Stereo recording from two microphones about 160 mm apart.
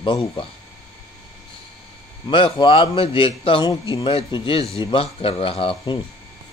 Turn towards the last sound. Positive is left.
turn(degrees=30)  # may be behind; listen again after turning